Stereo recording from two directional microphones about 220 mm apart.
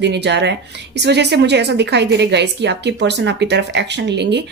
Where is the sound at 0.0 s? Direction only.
50° right (ahead or behind).